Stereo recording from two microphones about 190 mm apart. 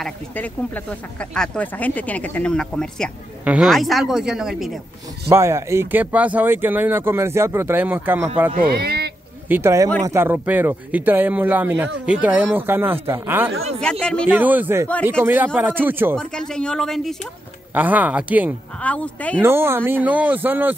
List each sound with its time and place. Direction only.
0.0 s speech: 5° left (ahead or behind)
5.3 s speech: 15° right (ahead or behind)
8.5 s speech: 55° right (ahead or behind)
9.5 s speech: 15° right (ahead or behind)
13.7 s speech: 5° left (ahead or behind)
14.2 s speech: 10° right (ahead or behind)
16.2 s speech: 5° left (ahead or behind)
17.7 s speech: 10° right (ahead or behind)
18.8 s speech: 5° left (ahead or behind)
19.4 s speech: 10° right (ahead or behind)